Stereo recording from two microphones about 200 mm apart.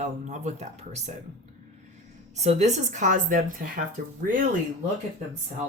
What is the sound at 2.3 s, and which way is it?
Speech, 35° right (ahead or behind).